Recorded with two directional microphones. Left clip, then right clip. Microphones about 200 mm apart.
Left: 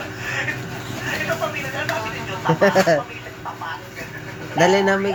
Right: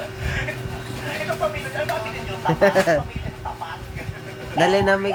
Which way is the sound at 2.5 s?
15° right (ahead or behind).